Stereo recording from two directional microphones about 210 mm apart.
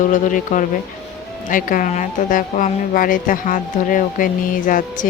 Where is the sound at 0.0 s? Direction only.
40° left (ahead or behind).